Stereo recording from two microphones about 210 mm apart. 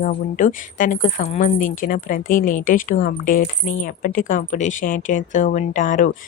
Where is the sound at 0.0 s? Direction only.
40° left (ahead or behind).